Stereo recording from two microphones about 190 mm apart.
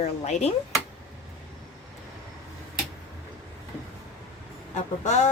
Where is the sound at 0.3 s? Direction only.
35° left (ahead or behind).